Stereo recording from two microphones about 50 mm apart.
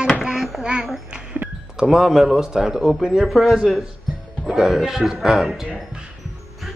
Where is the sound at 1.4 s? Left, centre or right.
Right.